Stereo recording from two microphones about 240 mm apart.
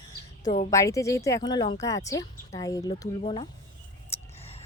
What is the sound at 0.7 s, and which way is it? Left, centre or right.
A woman's voice, centre.